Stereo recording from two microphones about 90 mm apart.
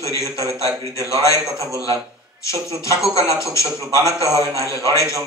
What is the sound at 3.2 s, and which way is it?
A man's voice, 35° left (ahead or behind).